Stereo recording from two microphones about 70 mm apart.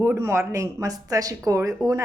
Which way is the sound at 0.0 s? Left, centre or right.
Right.